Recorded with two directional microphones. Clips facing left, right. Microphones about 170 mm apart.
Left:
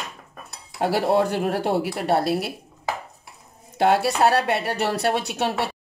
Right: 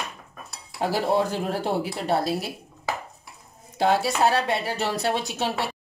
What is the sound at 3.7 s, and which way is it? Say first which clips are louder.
Speech: left 3 dB; 65° left (ahead or behind).